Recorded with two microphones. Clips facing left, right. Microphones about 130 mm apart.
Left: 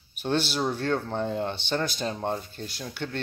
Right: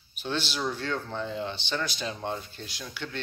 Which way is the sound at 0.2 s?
50° left (ahead or behind).